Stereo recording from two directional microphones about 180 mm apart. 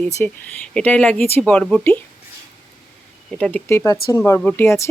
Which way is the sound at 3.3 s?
10° left (ahead or behind).